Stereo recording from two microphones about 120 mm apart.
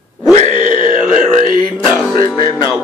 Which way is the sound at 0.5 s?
45° left (ahead or behind).